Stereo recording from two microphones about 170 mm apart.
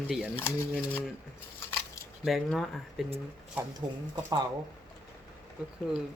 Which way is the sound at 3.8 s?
25° right (ahead or behind).